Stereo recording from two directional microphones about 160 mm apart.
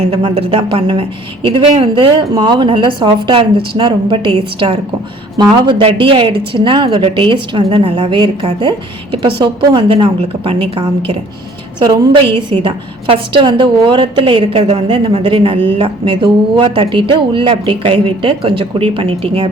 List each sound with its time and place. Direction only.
0.0 s speech: 35° right (ahead or behind)